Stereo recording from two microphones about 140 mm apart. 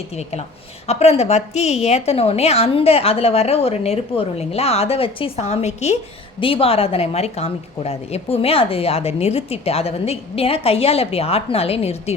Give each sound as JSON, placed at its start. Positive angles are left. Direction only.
{"t": 0.1, "sound": "a woman's voice", "side_deg": 50}